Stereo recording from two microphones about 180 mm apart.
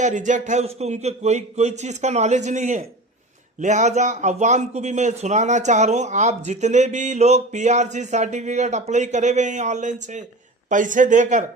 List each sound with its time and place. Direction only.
0.0 s a man's voice: 45° right (ahead or behind)